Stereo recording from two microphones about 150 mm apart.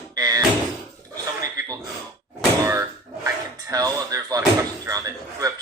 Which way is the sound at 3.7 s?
25° right (ahead or behind).